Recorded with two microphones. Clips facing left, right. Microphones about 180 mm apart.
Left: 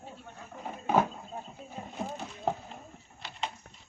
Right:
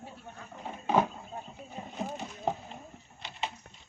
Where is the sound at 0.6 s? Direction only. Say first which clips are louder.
Even; 5° left (ahead or behind).